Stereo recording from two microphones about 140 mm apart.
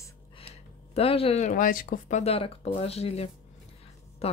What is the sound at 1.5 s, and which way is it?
Speech, 75° left (ahead or behind).